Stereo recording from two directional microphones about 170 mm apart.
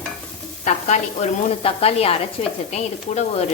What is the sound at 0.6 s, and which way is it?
Speech, 45° left (ahead or behind).